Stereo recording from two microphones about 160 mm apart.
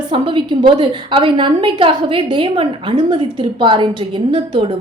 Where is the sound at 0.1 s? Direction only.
30° right (ahead or behind).